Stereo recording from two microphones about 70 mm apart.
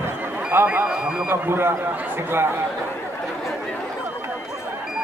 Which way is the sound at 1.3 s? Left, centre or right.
Right.